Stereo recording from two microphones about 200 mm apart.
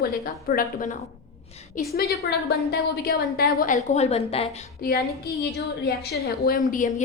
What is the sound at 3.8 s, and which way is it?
Speech, 35° left (ahead or behind).